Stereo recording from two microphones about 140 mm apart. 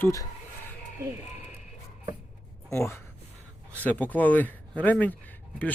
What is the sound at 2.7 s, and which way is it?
Speech, 20° left (ahead or behind).